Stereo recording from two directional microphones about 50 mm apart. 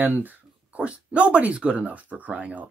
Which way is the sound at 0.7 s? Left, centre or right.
Right.